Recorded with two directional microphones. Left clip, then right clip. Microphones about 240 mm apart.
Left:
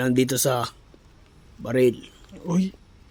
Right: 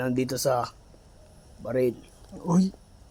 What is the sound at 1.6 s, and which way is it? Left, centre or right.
Speech, left.